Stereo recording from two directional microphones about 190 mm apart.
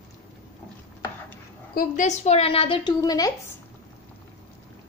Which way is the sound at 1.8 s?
40° left (ahead or behind).